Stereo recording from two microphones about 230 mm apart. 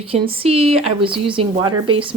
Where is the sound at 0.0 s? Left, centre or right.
Right.